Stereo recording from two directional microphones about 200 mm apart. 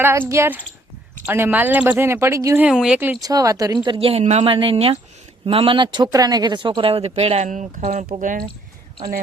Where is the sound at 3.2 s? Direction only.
20° right (ahead or behind).